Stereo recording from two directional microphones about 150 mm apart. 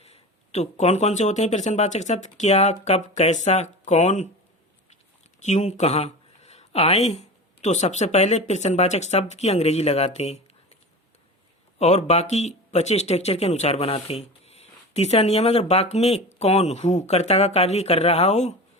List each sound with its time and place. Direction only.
0.0 s speech: 45° left (ahead or behind)
5.4 s speech: 50° left (ahead or behind)
11.8 s speech: 45° left (ahead or behind)